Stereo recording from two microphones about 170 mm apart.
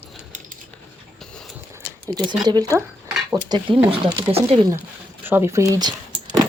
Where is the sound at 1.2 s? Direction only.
5° left (ahead or behind).